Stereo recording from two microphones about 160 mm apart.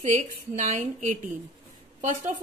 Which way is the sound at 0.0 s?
50° right (ahead or behind).